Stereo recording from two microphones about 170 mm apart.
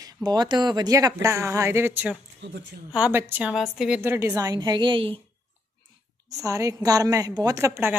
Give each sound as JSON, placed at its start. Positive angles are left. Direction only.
{"t": 0.0, "sound": "speech", "side_deg": -20}
{"t": 2.4, "sound": "speech", "side_deg": -90}
{"t": 2.9, "sound": "speech", "side_deg": -10}
{"t": 4.0, "sound": "a woman's voice", "side_deg": -15}
{"t": 6.3, "sound": "a woman's voice", "side_deg": -20}